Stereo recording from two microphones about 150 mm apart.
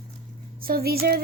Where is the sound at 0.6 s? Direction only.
85° right.